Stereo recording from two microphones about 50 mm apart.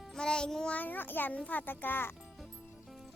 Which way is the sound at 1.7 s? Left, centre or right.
Left.